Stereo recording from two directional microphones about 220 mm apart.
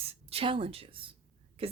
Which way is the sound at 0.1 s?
25° right (ahead or behind).